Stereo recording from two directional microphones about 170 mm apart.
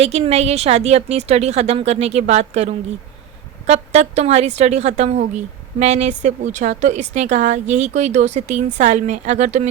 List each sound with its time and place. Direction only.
0.0 s a woman's voice: 40° right (ahead or behind)